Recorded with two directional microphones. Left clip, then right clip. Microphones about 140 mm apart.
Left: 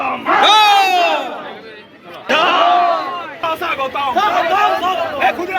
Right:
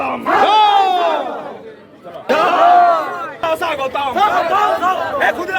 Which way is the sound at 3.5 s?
10° right (ahead or behind).